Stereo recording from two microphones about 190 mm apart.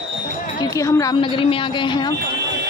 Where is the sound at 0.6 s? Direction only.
15° left (ahead or behind).